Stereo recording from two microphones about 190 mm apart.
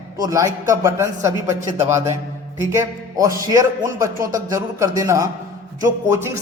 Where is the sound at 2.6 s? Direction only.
15° right (ahead or behind).